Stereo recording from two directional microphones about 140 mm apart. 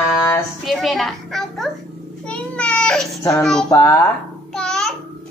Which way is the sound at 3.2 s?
25° left (ahead or behind).